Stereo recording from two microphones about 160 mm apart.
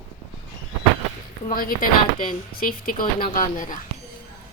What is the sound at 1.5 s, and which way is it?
Speech, 65° left (ahead or behind).